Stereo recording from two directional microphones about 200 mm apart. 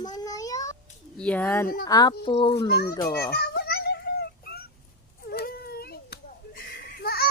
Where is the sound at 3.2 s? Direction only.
55° left (ahead or behind).